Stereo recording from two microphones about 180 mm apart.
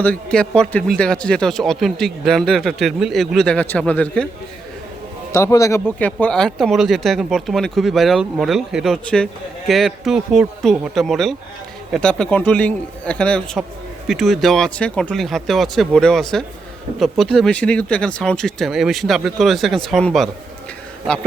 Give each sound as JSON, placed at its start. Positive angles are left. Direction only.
{"t": 0.0, "sound": "speech", "side_deg": 5}
{"t": 5.3, "sound": "a man's voice", "side_deg": 15}